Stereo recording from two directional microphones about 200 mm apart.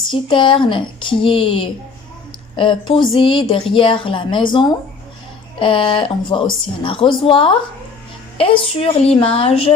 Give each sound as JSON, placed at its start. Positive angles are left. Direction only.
{"t": 0.1, "sound": "a woman's voice", "side_deg": 25}